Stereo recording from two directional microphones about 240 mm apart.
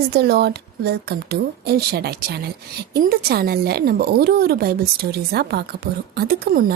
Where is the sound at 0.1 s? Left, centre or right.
Right.